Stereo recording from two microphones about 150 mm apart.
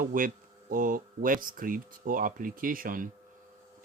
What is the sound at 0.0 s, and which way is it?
Speech, 65° right (ahead or behind).